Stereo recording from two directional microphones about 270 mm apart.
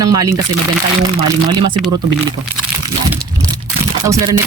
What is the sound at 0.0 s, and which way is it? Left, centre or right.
Speech, centre.